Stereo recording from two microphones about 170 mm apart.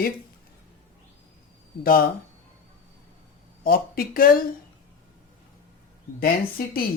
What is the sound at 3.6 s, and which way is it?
Speech, 60° left (ahead or behind).